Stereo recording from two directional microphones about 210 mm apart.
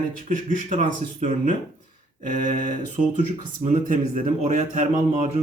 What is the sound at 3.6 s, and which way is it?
Speech, 35° right (ahead or behind).